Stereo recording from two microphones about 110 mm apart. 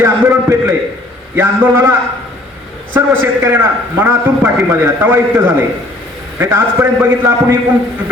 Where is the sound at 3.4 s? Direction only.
20° right (ahead or behind).